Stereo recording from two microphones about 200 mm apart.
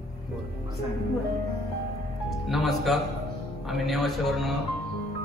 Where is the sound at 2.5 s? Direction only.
Centre (ahead or behind).